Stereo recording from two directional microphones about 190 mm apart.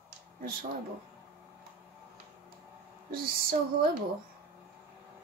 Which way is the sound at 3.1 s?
50° right (ahead or behind).